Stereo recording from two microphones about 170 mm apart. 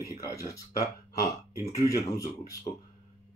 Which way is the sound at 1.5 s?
20° left (ahead or behind).